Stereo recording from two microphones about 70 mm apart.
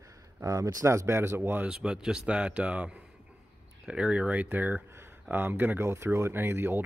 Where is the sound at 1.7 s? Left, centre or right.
Centre; by 6.9 s right.